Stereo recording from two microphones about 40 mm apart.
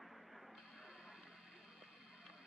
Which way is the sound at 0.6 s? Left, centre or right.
Centre.